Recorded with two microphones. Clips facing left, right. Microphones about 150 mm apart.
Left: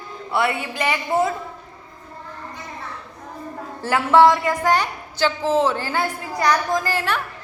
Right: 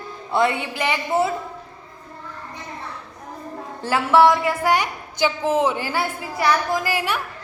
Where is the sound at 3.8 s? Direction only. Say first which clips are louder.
Left 1 dB; 15° right (ahead or behind).